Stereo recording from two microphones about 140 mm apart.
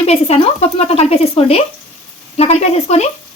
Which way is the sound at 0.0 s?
45° left (ahead or behind).